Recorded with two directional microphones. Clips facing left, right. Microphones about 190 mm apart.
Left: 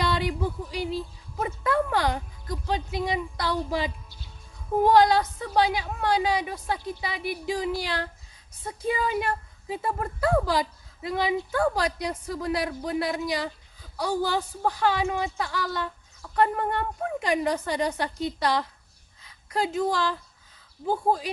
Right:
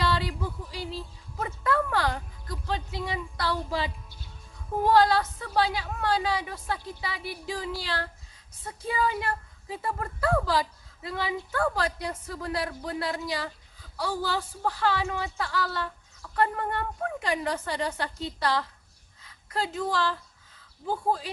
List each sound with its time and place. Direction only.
0.0 s a woman's voice: 15° left (ahead or behind)